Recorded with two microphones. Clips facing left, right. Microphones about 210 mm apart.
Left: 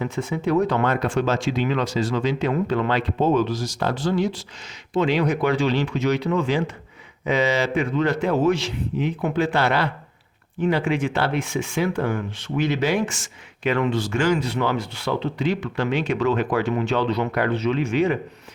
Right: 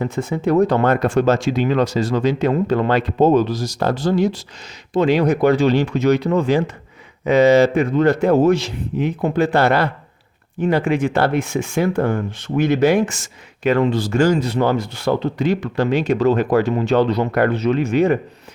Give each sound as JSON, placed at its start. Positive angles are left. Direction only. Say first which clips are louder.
{"t": 0.0, "sound": "speech", "louder": "right 4 dB", "side_deg": -45}